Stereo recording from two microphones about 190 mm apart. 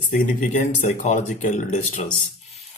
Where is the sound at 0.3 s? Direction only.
40° left (ahead or behind).